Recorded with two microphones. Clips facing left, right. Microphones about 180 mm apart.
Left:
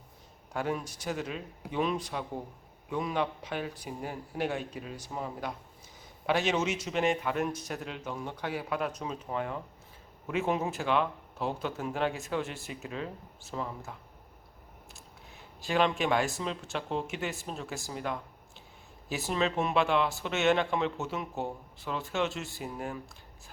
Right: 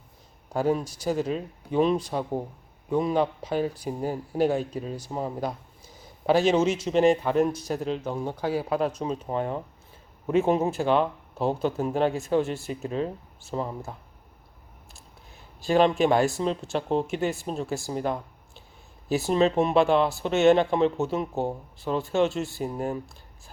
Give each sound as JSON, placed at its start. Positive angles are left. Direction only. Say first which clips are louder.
{"t": 0.5, "sound": "speech", "louder": "right 8 dB", "side_deg": -35}
{"t": 15.6, "sound": "speech", "louder": "right 7 dB", "side_deg": -35}